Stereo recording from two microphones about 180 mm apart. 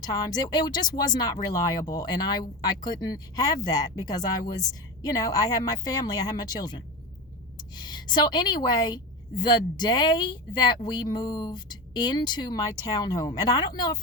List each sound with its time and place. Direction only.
0.0 s speech: 20° left (ahead or behind)